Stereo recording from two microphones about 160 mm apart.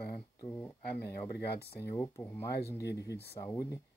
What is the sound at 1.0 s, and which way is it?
Speech, 85° left.